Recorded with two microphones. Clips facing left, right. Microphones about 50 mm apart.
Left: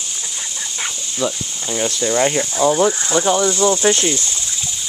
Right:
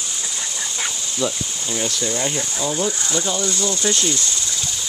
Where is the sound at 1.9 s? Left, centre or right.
Left.